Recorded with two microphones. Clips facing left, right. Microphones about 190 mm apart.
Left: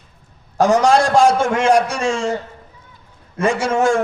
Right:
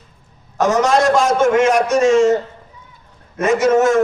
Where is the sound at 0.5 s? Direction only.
30° left (ahead or behind).